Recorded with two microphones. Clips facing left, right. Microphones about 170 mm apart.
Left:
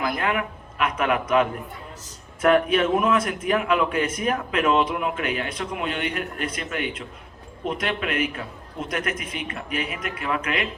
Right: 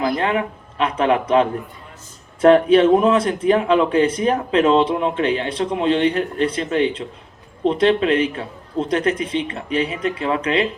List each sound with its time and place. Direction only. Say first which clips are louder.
0.0 s a man's voice: right 5 dB; 30° right (ahead or behind)